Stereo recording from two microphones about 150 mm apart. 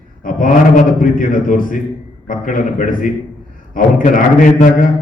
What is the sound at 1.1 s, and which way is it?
A man's voice, 65° left (ahead or behind).